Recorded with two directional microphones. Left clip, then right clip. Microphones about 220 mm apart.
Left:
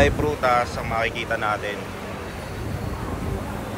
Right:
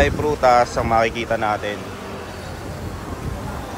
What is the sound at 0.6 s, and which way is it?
Speech, 15° right (ahead or behind).